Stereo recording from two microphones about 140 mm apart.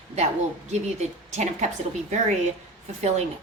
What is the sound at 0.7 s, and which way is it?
A woman's voice, 55° right (ahead or behind).